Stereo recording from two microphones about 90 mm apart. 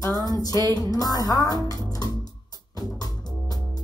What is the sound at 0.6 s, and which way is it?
Music, 45° right (ahead or behind).